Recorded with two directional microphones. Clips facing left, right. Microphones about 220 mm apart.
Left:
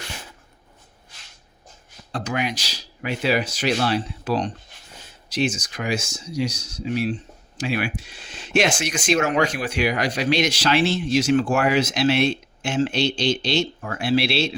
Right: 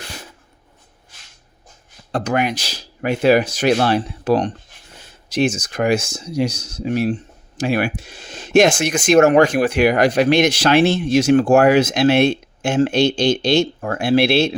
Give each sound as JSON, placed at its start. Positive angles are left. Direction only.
{"t": 2.1, "sound": "speech", "side_deg": -55}